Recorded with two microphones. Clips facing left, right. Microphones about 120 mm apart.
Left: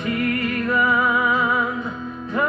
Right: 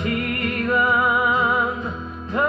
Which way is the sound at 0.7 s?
25° right (ahead or behind).